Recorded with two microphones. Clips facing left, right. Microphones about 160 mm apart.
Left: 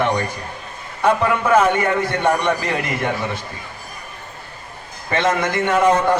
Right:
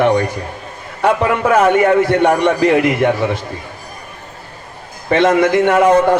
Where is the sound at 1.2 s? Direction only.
65° right (ahead or behind).